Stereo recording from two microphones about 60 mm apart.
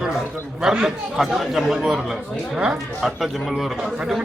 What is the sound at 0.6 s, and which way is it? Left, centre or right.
A man's voice, centre.